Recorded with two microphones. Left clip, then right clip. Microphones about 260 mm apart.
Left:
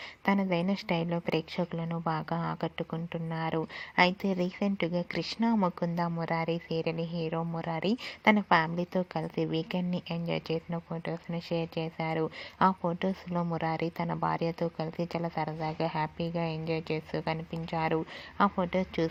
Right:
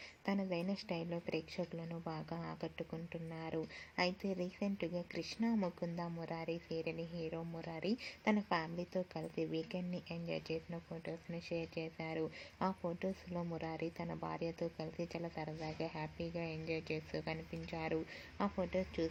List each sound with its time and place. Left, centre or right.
0.3 s a woman's voice: left